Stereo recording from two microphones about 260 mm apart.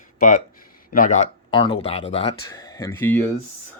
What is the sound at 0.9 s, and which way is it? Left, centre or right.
Speech, left.